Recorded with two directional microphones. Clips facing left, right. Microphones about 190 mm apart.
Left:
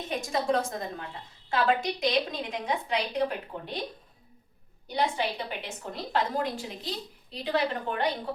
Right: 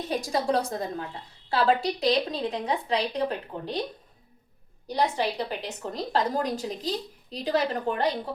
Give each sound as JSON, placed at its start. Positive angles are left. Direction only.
{"t": 0.1, "sound": "a woman's voice", "side_deg": -35}
{"t": 4.9, "sound": "a woman's voice", "side_deg": -35}